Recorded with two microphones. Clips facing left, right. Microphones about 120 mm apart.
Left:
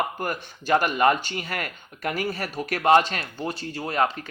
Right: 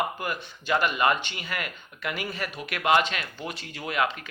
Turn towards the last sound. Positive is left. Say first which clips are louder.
# left 3 dB
turn(degrees=35)  # may be behind; listen again after turning